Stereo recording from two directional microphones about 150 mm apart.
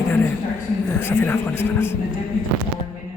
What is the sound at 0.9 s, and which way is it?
Speech, 15° left (ahead or behind).